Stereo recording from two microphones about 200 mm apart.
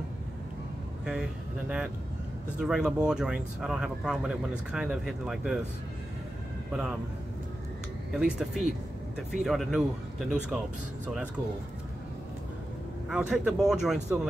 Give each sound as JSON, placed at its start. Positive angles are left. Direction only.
{"t": 1.0, "sound": "speech", "side_deg": -5}
{"t": 6.7, "sound": "speech", "side_deg": -5}
{"t": 8.1, "sound": "speech", "side_deg": -5}
{"t": 13.1, "sound": "speech", "side_deg": -5}